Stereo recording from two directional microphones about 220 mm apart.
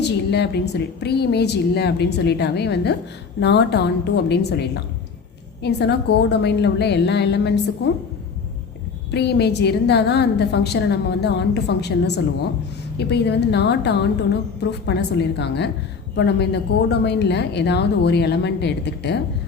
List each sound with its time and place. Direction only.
0.0 s a woman's voice: 50° left (ahead or behind)
9.1 s a woman's voice: 50° left (ahead or behind)